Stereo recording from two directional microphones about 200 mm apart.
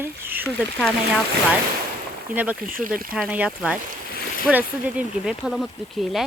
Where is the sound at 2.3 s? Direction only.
10° right (ahead or behind).